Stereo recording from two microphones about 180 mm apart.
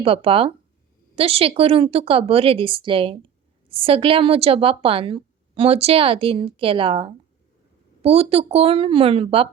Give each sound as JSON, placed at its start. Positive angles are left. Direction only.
{"t": 0.0, "sound": "a woman's voice", "side_deg": -30}